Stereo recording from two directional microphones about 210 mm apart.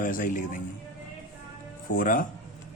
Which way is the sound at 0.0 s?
40° left (ahead or behind).